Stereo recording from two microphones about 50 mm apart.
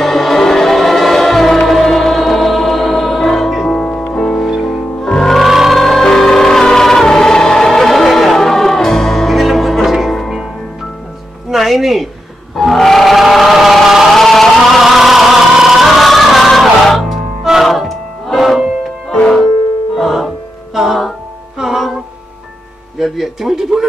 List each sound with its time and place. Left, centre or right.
0.0 s music: centre
3.7 s music: left
4.0 s music: centre
4.4 s music: centre
5.4 s music: centre
11.5 s music: centre
12.5 s a sound: centre
14.1 s music: centre
22.9 s music: centre